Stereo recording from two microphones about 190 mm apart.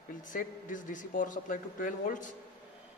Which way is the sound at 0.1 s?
45° left (ahead or behind).